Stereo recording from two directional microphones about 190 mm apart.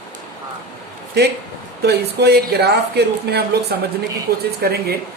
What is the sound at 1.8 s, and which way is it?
Speech, 60° right (ahead or behind).